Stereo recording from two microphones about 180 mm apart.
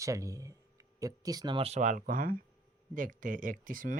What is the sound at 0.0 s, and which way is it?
Speech, 15° right (ahead or behind).